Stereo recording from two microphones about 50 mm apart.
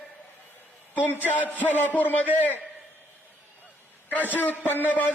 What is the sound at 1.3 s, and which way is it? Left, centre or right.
Speech, left.